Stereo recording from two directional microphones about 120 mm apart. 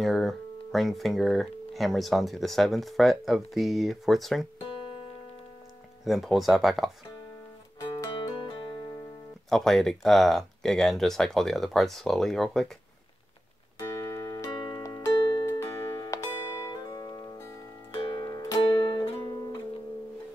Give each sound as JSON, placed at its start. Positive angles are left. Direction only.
{"t": 0.0, "sound": "speech", "side_deg": 0}
{"t": 6.0, "sound": "speech", "side_deg": 0}
{"t": 7.8, "sound": "music", "side_deg": 25}
{"t": 8.1, "sound": "music", "side_deg": 40}
{"t": 9.5, "sound": "speech", "side_deg": 5}
{"t": 13.7, "sound": "music", "side_deg": 25}
{"t": 14.6, "sound": "music", "side_deg": 35}
{"t": 15.1, "sound": "music", "side_deg": 45}
{"t": 15.4, "sound": "music", "side_deg": 25}
{"t": 18.8, "sound": "music", "side_deg": 45}